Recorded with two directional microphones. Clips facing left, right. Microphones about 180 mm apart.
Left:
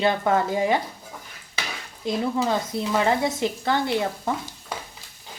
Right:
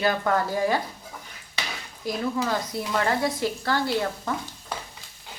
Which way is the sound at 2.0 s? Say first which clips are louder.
Left 3 dB; 25° left (ahead or behind).